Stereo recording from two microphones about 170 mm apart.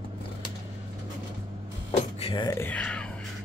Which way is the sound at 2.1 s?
35° left (ahead or behind).